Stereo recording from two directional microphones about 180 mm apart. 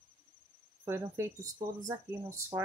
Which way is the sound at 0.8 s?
15° right (ahead or behind).